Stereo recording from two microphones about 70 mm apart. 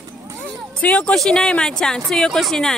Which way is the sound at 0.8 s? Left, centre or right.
Centre.